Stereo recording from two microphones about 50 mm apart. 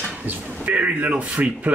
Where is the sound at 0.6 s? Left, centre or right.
Right.